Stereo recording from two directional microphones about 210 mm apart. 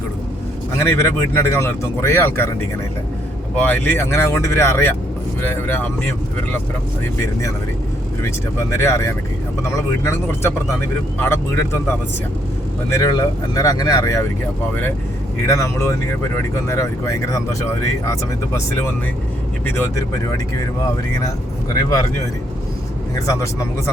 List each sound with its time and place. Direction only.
0.8 s speech: 10° left (ahead or behind)
3.5 s speech: 10° left (ahead or behind)
8.2 s speech: 10° left (ahead or behind)
12.9 s speech: 15° left (ahead or behind)
15.4 s speech: 15° left (ahead or behind)
23.1 s speech: 15° left (ahead or behind)